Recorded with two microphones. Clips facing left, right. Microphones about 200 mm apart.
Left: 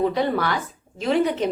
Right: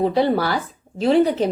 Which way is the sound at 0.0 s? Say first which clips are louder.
Right 3 dB; 35° right (ahead or behind).